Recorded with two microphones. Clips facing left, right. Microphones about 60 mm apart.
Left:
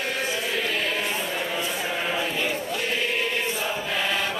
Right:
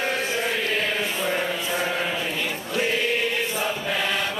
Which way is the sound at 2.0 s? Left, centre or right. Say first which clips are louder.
Even; centre.